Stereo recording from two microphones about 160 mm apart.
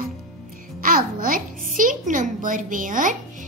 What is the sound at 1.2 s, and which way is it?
A woman's voice, 60° right (ahead or behind).